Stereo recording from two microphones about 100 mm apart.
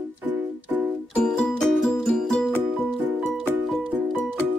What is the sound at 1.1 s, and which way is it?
Music, 5° left (ahead or behind).